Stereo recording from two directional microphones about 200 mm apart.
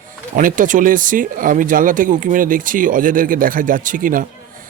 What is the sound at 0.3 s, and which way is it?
A man's voice, 40° right (ahead or behind).